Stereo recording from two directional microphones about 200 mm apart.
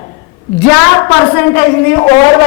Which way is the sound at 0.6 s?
15° left (ahead or behind).